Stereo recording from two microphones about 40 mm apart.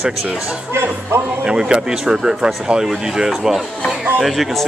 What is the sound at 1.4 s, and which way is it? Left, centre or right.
Speech, right.